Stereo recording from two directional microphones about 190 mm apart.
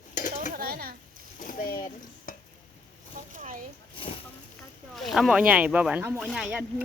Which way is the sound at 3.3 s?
45° right (ahead or behind).